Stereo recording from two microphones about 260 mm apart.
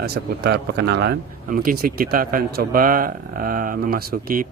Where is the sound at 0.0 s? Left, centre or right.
Right.